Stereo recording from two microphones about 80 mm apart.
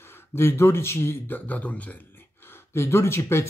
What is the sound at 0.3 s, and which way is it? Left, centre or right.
Speech, left.